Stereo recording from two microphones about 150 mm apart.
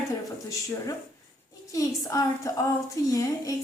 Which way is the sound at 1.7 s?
25° left (ahead or behind).